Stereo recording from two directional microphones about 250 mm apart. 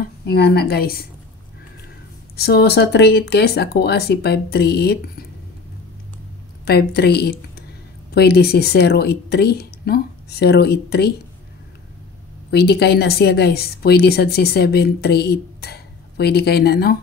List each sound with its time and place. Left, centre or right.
0.3 s a woman's voice: left
2.3 s a woman's voice: left
6.6 s a woman's voice: left
12.4 s a woman's voice: left